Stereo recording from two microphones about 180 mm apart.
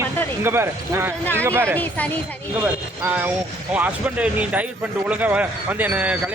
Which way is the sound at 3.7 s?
10° right (ahead or behind).